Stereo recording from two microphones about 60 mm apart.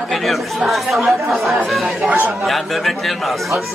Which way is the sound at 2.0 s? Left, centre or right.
Right.